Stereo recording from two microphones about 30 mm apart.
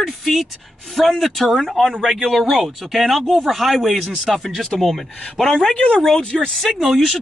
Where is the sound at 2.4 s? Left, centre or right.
Centre.